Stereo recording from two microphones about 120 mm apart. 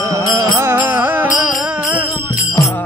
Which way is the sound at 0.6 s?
20° right (ahead or behind).